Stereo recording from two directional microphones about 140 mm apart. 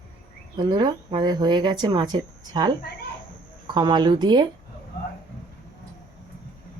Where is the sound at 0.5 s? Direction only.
35° right (ahead or behind).